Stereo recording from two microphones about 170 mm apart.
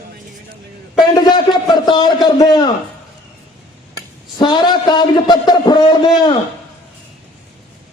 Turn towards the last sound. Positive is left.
turn(degrees=25)  # may be behind; listen again after turning